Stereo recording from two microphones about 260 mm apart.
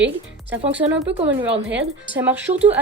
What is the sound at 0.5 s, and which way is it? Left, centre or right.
Speech, centre.